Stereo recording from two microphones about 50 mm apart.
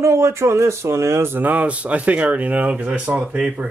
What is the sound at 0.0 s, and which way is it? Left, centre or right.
Speech, right.